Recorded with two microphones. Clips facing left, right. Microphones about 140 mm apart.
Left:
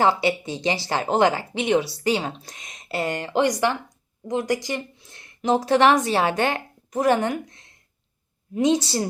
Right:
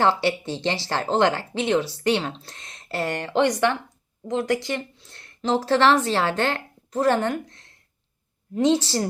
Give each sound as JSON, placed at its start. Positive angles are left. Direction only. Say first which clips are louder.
{"t": 0.0, "sound": "speech", "louder": "left 1 dB", "side_deg": 15}
{"t": 4.4, "sound": "speech", "louder": "even", "side_deg": -55}
{"t": 4.7, "sound": "a woman's voice", "louder": "even", "side_deg": 15}